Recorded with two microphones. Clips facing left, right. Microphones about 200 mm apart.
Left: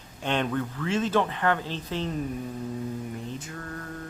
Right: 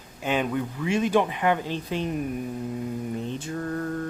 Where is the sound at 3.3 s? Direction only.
30° right (ahead or behind).